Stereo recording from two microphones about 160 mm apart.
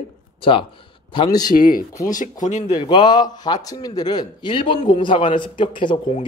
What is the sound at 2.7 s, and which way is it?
A man's voice, 30° left (ahead or behind).